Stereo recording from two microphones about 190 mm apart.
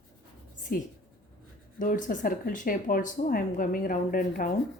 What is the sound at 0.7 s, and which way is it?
Speech, 50° left (ahead or behind).